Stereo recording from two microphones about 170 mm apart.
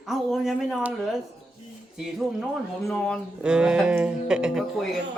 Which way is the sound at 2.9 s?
Centre (ahead or behind).